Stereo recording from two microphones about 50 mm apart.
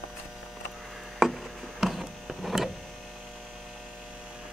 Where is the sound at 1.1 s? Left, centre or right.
Centre.